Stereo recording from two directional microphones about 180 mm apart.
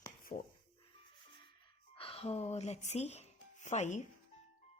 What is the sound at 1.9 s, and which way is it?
Speech, 30° left (ahead or behind).